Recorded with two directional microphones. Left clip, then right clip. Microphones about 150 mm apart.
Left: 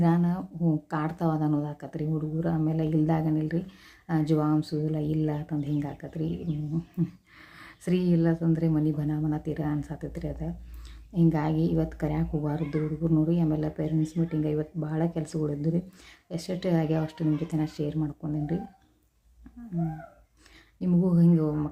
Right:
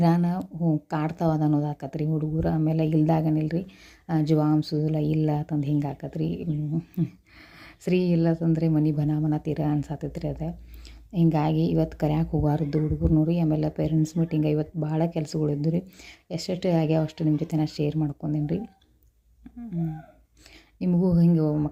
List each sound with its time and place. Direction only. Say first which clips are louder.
0.0 s speech: right 3 dB; 40° right (ahead or behind)
7.6 s speech: right 4 dB; 30° right (ahead or behind)
20.7 s speech: right 2 dB; 30° right (ahead or behind)